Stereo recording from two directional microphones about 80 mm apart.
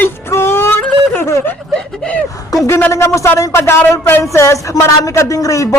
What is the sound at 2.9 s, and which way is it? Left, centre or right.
Speech, left.